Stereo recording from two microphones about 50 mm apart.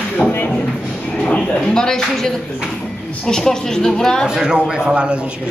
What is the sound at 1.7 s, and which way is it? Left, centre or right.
A woman's voice, centre.